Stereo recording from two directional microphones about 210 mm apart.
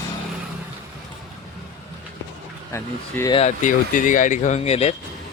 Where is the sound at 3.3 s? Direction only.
35° left (ahead or behind).